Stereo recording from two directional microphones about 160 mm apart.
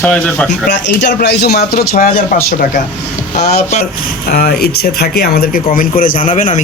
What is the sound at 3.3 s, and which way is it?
Speech, 45° left (ahead or behind).